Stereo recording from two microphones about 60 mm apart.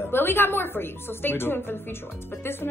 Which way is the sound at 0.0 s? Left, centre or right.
Left.